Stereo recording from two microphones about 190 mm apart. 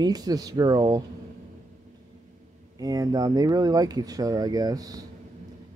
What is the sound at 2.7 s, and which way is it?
Speech, 20° right (ahead or behind).